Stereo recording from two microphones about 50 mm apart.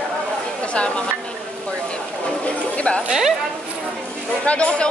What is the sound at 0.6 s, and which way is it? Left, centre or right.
Speech, left.